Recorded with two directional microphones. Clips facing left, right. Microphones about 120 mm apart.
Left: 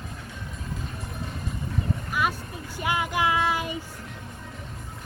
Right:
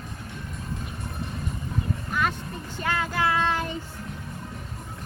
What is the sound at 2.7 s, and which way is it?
Child singing, 15° left (ahead or behind).